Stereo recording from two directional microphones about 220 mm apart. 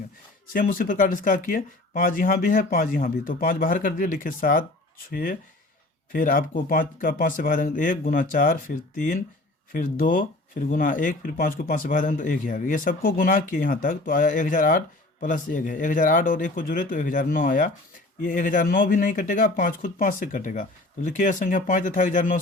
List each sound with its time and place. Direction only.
0.5 s speech: 40° left (ahead or behind)